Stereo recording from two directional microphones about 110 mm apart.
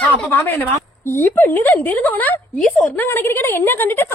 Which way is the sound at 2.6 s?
5° left (ahead or behind).